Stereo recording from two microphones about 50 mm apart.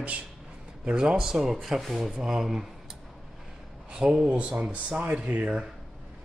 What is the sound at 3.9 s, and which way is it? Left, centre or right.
Speech, centre.